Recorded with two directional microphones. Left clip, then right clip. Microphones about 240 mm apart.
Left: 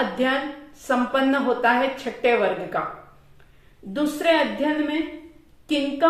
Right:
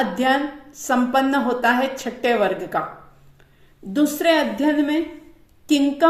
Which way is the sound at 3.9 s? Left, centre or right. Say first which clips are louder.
Right 3 dB; right.